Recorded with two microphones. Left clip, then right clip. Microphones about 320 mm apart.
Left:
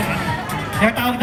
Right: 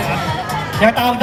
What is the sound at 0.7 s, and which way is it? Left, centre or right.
Speech, right.